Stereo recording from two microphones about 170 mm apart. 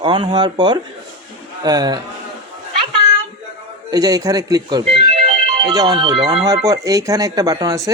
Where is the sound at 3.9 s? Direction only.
20° right (ahead or behind).